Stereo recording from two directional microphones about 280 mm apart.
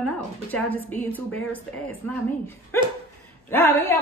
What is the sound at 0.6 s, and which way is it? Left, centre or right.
A woman's voice, centre.